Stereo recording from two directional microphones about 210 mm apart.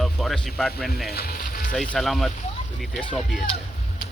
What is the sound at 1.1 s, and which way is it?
Music, 45° left (ahead or behind).